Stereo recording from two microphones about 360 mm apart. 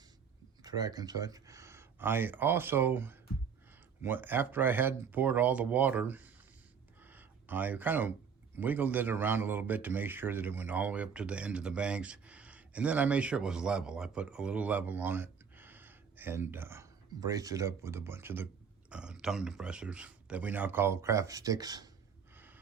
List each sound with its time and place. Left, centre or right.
0.6 s a man's voice: centre
7.0 s a sound: centre
8.5 s a man's voice: centre